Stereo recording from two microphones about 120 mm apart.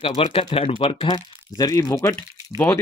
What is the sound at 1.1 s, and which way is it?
Speech, 30° left (ahead or behind).